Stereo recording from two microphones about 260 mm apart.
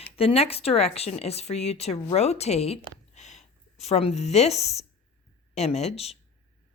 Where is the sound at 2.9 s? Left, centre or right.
Left.